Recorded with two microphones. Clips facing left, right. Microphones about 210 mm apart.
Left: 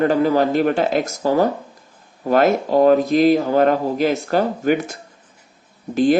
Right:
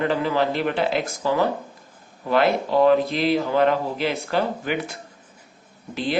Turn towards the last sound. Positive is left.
turn(degrees=45)  # may be behind; listen again after turning